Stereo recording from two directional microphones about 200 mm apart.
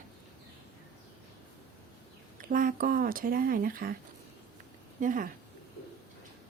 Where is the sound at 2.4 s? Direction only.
45° right (ahead or behind).